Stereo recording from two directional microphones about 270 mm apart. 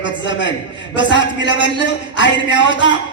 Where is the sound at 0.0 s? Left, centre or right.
Left.